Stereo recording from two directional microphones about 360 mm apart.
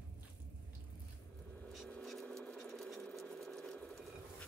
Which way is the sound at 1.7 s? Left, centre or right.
Centre.